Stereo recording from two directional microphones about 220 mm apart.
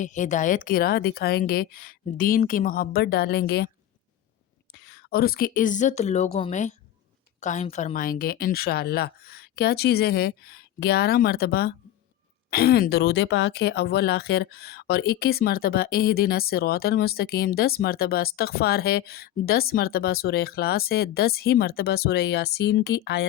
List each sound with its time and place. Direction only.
0.0 s a woman's voice: 35° left (ahead or behind)
4.7 s a woman's voice: 45° left (ahead or behind)